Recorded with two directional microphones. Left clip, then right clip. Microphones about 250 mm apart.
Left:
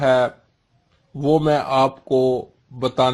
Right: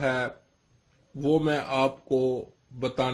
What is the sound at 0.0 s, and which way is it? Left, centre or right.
Speech, left.